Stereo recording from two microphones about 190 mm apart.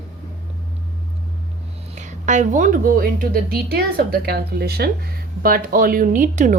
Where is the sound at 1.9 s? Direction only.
40° right (ahead or behind).